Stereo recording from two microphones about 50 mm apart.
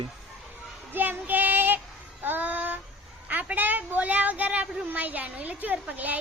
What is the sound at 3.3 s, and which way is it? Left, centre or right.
Speech, right.